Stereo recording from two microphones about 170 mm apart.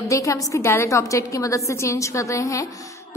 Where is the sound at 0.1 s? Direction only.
20° left (ahead or behind).